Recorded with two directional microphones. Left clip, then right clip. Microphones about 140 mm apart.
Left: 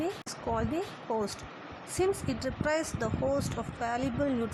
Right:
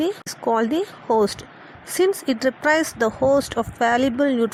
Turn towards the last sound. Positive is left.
turn(degrees=-45)  # may be behind; listen again after turning